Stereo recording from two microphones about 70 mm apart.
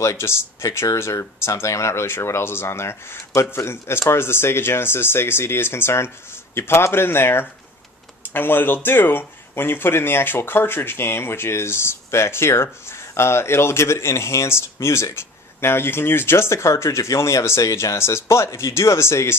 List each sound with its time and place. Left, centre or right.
0.0 s speech: left